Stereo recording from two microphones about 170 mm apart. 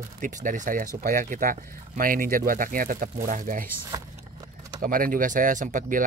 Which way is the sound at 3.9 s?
20° right (ahead or behind).